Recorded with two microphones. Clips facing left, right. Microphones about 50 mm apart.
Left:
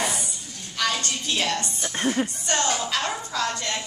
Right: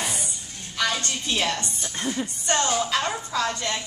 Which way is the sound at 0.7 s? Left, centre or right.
Centre.